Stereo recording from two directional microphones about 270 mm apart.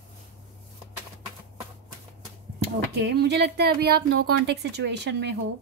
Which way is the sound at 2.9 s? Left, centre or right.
Right.